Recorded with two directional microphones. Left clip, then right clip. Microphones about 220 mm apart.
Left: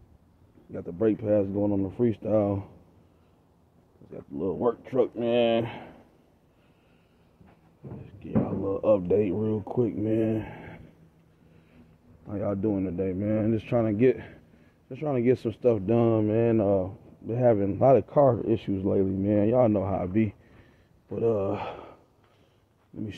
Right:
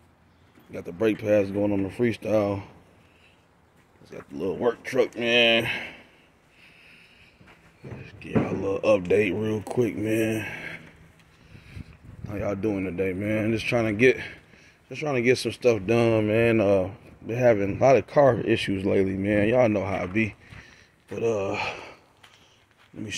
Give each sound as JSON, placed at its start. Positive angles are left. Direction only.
{"t": 0.7, "sound": "speech", "side_deg": 5}
{"t": 4.1, "sound": "speech", "side_deg": 0}
{"t": 8.6, "sound": "speech", "side_deg": 0}
{"t": 12.3, "sound": "speech", "side_deg": 0}